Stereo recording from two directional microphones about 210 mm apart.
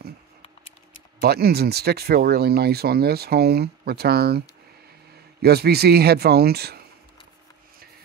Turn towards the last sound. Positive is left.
turn(degrees=-50)  # may be behind; listen again after turning